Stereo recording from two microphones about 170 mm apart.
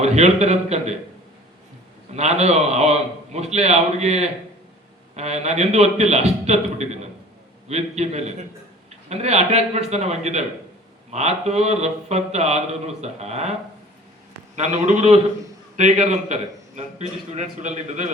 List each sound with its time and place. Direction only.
0.0 s speech: 40° right (ahead or behind)
2.1 s speech: 40° right (ahead or behind)
14.5 s a man's voice: 45° right (ahead or behind)